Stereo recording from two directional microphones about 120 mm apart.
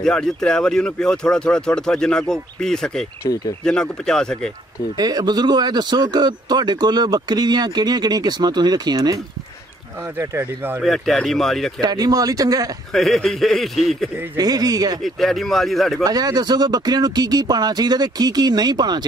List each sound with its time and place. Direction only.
0.0 s speech: 5° left (ahead or behind)
4.9 s speech: 35° right (ahead or behind)
10.1 s speech: 20° right (ahead or behind)
10.8 s speech: centre (ahead or behind)
11.8 s speech: 35° right (ahead or behind)
12.9 s speech: centre (ahead or behind)
14.3 s speech: 35° right (ahead or behind)
15.0 s speech: centre (ahead or behind)
16.0 s speech: 35° right (ahead or behind)